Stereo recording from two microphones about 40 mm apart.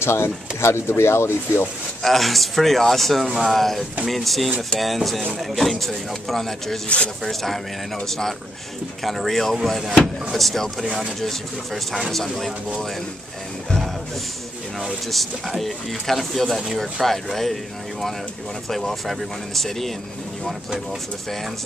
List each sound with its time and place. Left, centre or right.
0.0 s speech: left
2.0 s speech: centre
3.3 s speech: centre
3.5 s speech: centre
15.0 s speech: centre
18.7 s speech: centre